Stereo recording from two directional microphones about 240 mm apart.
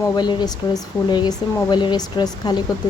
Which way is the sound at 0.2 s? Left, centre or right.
Centre.